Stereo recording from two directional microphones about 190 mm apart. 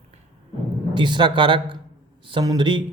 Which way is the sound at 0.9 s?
25° right (ahead or behind).